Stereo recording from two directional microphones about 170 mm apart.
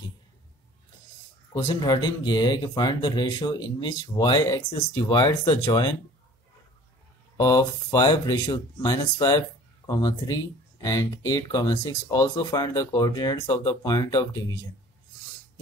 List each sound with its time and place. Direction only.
1.5 s speech: 25° left (ahead or behind)
7.3 s speech: 20° left (ahead or behind)